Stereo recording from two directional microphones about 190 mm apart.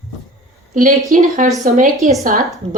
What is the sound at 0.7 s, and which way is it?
Speech, 40° right (ahead or behind).